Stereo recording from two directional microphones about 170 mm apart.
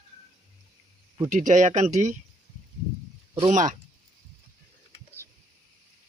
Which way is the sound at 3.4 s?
45° right (ahead or behind).